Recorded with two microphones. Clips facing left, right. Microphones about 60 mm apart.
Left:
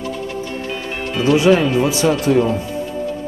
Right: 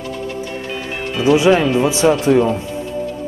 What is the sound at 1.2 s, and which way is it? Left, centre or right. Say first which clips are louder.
Speech: right 1 dB; centre.